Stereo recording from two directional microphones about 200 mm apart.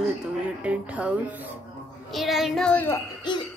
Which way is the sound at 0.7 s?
5° right (ahead or behind).